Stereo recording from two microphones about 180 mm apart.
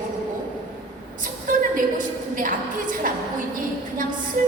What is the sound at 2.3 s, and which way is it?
Speech, 45° right (ahead or behind).